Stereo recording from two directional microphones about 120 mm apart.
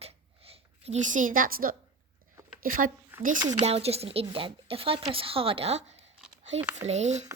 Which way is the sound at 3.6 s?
55° right (ahead or behind).